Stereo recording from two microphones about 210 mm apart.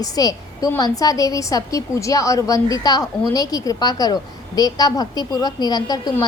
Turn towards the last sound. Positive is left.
turn(degrees=20)  # may be behind; listen again after turning